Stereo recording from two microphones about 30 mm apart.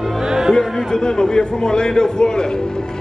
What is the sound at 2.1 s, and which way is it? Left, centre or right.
Speech, left.